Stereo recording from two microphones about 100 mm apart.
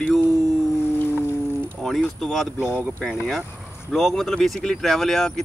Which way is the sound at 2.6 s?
15° right (ahead or behind).